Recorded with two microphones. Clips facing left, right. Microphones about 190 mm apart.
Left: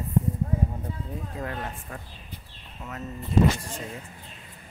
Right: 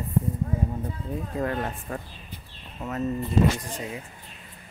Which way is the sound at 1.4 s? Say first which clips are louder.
Right 7 dB; 50° right (ahead or behind).